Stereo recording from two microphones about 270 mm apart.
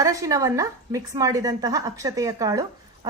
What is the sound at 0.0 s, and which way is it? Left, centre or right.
A woman's voice, centre.